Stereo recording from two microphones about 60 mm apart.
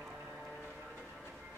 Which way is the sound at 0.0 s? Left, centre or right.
Centre.